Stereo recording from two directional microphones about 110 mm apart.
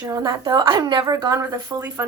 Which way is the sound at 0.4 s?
45° right (ahead or behind).